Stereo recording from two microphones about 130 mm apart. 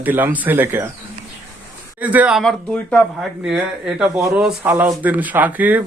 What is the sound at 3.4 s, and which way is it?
Speech, 5° right (ahead or behind).